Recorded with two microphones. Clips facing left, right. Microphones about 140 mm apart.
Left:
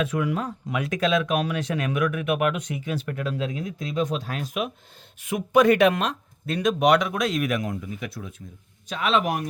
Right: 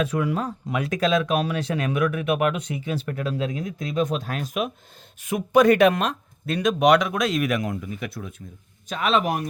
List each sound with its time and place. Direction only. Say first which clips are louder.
0.0 s speech: right 1 dB; 35° right (ahead or behind)
6.4 s speech: right 1 dB; 80° right; by 8.3 s 60° right (ahead or behind)
8.9 s speech: right 1 dB; 45° right (ahead or behind)